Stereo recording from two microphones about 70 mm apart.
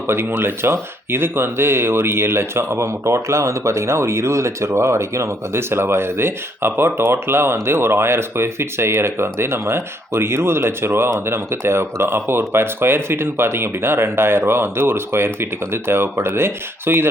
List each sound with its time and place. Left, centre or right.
0.1 s speech: right